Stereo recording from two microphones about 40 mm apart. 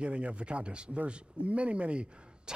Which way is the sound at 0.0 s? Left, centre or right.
Right.